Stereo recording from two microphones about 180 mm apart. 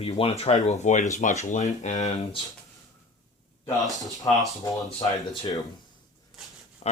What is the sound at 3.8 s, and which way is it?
Speech, centre (ahead or behind).